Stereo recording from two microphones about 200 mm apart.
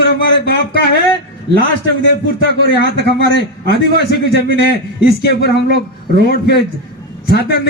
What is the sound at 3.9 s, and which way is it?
A man's voice, 50° left (ahead or behind).